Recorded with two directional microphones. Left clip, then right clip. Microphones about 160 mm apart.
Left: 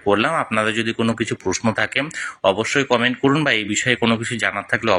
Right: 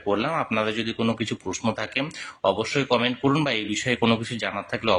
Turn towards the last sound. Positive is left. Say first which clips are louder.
# left 6 dB
turn(degrees=15)  # may be behind; listen again after turning